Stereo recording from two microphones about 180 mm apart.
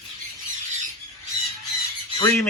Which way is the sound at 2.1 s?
15° left (ahead or behind).